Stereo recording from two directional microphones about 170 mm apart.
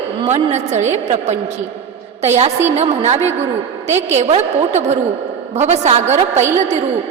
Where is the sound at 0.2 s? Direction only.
30° right (ahead or behind).